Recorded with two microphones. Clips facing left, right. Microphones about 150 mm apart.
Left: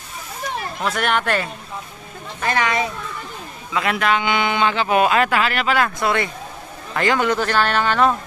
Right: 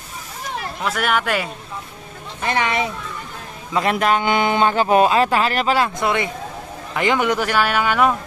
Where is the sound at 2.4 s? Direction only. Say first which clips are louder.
Even; 20° right (ahead or behind).